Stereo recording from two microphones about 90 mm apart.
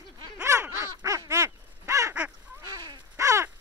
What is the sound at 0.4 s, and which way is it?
Quack, 35° right (ahead or behind).